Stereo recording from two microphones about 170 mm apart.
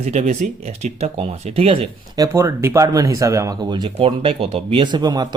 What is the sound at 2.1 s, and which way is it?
Speech, 20° right (ahead or behind).